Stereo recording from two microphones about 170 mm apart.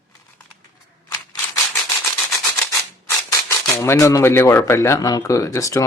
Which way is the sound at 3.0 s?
15° left (ahead or behind).